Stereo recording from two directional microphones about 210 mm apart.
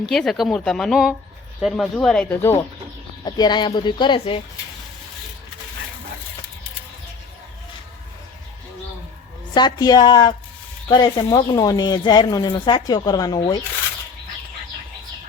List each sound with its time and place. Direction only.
0.0 s speech: centre (ahead or behind); by 4.4 s 20° left (ahead or behind)
9.6 s speech: 20° left (ahead or behind)